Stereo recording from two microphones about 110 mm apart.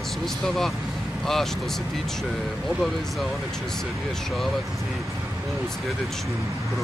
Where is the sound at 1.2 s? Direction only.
Centre (ahead or behind).